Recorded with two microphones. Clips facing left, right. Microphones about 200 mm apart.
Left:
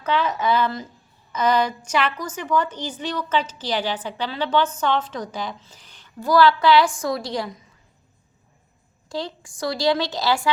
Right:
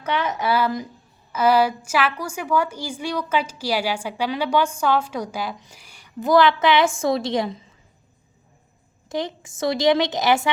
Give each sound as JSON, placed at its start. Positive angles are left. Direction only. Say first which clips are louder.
{"t": 0.1, "sound": "a woman's voice", "louder": "left 1 dB", "side_deg": -15}
{"t": 9.0, "sound": "a woman's voice", "louder": "right 3 dB", "side_deg": -20}